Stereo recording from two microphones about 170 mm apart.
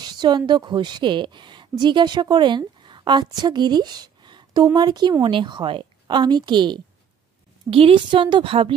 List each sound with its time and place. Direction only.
0.0 s a woman's voice: 25° right (ahead or behind)